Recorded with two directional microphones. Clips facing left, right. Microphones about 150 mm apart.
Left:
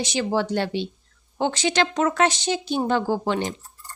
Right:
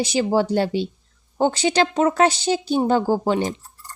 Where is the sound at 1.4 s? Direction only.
40° right (ahead or behind).